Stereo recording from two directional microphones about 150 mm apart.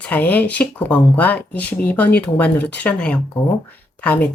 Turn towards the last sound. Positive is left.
turn(degrees=10)  # may be behind; listen again after turning